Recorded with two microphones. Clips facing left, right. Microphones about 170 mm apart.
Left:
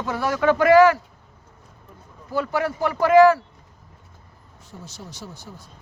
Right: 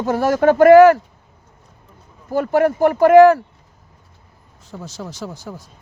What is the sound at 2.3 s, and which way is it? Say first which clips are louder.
Speech: right 8 dB; 50° right (ahead or behind).